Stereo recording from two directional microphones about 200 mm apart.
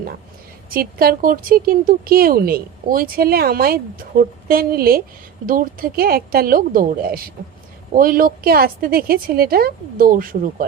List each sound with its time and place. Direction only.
0.7 s speech: 45° right (ahead or behind)